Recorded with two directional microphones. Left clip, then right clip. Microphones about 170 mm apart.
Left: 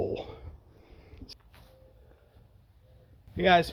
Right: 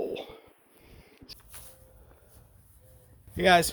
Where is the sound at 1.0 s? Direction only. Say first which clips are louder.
Right 1 dB; 15° left (ahead or behind).